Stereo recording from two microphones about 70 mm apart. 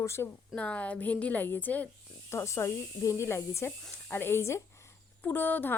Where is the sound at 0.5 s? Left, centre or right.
Centre.